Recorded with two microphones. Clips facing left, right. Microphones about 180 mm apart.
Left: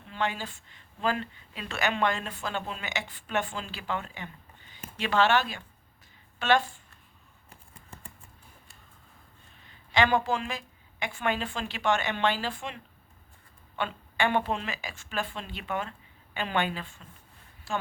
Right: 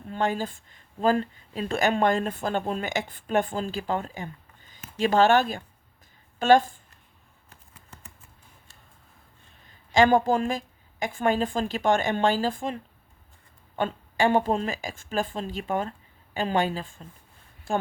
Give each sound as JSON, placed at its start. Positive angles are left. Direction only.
{"t": 0.0, "sound": "speech", "side_deg": -45}
{"t": 9.9, "sound": "a woman's voice", "side_deg": -45}
{"t": 17.7, "sound": "a woman's voice", "side_deg": -50}